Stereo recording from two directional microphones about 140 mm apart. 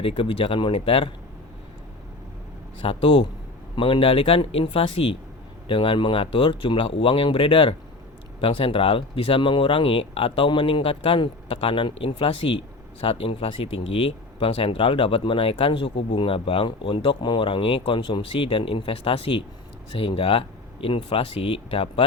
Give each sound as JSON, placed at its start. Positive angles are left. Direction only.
{"t": 0.0, "sound": "speech", "side_deg": 40}
{"t": 2.8, "sound": "speech", "side_deg": 40}